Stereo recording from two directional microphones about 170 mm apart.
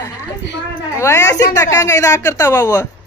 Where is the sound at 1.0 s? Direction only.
20° left (ahead or behind).